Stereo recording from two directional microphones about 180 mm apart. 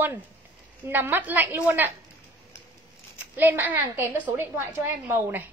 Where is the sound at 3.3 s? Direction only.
10° right (ahead or behind).